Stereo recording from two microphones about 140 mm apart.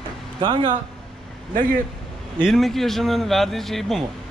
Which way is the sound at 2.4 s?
Centre (ahead or behind).